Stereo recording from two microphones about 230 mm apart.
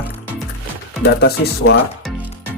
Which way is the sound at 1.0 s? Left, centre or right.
Left.